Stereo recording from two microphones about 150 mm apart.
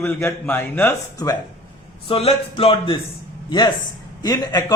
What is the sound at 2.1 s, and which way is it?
Speech, 40° left (ahead or behind).